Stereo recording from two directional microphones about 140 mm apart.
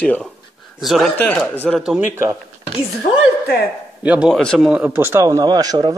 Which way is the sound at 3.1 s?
55° left (ahead or behind).